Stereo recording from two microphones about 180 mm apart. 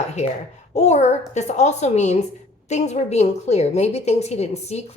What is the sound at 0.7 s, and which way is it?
A woman's voice, 40° left (ahead or behind).